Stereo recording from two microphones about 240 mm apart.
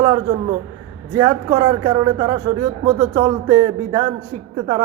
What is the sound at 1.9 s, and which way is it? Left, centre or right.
Speech, centre.